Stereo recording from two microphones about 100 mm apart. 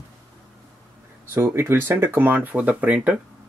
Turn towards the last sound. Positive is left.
turn(degrees=-15)  # may be behind; listen again after turning